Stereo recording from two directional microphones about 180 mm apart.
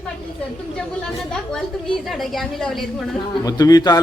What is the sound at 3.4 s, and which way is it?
Speech, 20° left (ahead or behind).